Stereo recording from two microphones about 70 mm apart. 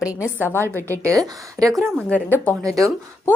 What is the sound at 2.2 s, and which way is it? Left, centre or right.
Speech, left.